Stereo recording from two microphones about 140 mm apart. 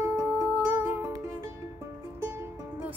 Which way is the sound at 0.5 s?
10° right (ahead or behind).